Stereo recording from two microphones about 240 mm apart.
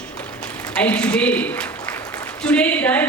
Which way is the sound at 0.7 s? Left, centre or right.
Centre.